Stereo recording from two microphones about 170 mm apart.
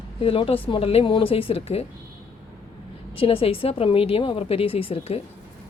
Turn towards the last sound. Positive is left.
turn(degrees=35)  # may be behind; listen again after turning